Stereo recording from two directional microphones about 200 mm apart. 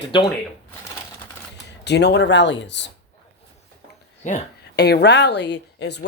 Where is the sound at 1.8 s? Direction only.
55° left (ahead or behind).